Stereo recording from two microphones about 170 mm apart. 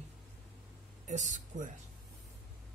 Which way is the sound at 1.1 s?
45° right (ahead or behind).